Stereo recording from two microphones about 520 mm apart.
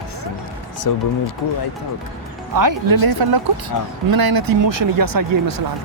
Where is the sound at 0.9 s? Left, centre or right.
Left.